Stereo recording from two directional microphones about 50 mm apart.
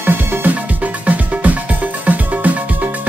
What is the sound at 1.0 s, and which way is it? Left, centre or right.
Music, right.